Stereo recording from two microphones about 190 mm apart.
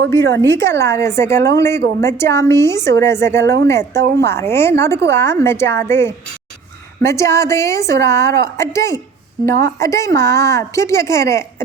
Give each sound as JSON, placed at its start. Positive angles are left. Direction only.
{"t": 0.1, "sound": "a woman's voice", "side_deg": 15}
{"t": 4.0, "sound": "a woman's voice", "side_deg": -60}
{"t": 4.4, "sound": "a woman's voice", "side_deg": 15}